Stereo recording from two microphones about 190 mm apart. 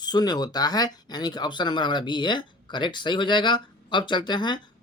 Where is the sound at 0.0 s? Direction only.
20° left (ahead or behind).